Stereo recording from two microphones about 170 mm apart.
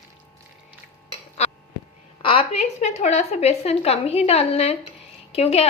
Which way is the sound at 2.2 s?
30° left (ahead or behind).